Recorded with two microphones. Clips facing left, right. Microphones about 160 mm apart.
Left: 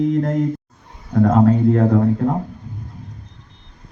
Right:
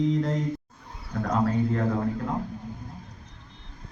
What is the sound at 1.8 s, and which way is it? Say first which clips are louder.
Mantra: left 11 dB; 50° left (ahead or behind).